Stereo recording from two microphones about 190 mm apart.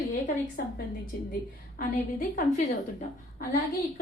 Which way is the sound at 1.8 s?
45° left (ahead or behind).